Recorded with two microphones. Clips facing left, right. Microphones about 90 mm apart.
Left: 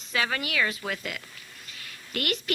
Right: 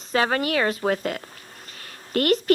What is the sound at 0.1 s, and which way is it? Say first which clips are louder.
A woman's voice: right 7 dB; 40° right (ahead or behind).